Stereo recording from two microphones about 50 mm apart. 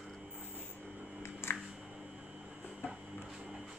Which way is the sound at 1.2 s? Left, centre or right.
Left.